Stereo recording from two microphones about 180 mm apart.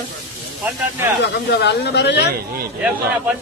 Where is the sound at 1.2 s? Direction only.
70° left (ahead or behind).